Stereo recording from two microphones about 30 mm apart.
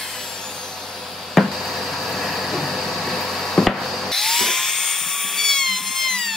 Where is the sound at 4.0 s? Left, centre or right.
Centre.